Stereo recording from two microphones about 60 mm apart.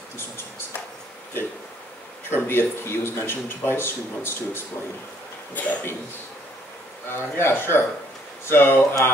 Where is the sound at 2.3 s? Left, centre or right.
Left.